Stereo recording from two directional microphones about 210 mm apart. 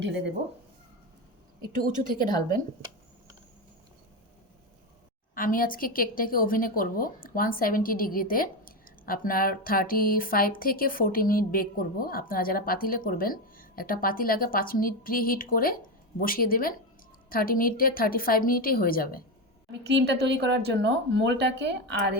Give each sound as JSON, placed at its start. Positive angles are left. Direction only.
{"t": 1.7, "sound": "a woman's voice", "side_deg": -40}
{"t": 2.1, "sound": "speech", "side_deg": 20}
{"t": 5.3, "sound": "a woman's voice", "side_deg": 40}
{"t": 19.7, "sound": "speech", "side_deg": -55}